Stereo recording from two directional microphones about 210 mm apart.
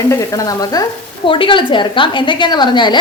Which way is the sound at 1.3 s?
25° left (ahead or behind).